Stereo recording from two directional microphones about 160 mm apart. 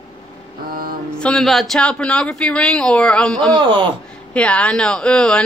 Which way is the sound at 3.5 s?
30° right (ahead or behind).